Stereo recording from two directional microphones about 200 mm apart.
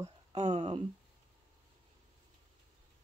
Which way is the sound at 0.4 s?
20° right (ahead or behind).